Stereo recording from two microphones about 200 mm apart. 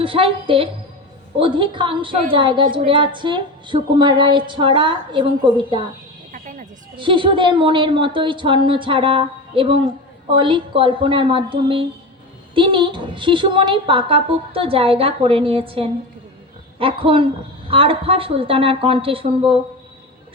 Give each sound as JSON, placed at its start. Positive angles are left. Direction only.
{"t": 0.0, "sound": "a woman's voice", "side_deg": -25}
{"t": 6.3, "sound": "music", "side_deg": -40}
{"t": 6.9, "sound": "a woman's voice", "side_deg": -25}